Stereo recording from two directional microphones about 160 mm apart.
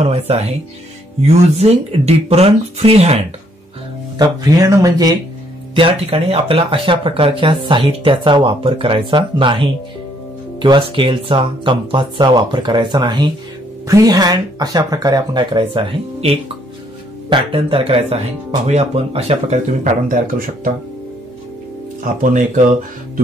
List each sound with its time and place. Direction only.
0.0 s speech: 40° right (ahead or behind)
4.2 s speech: 25° right (ahead or behind)
5.8 s speech: 35° right (ahead or behind); by 20.7 s 60° right (ahead or behind)
22.0 s speech: 55° right (ahead or behind)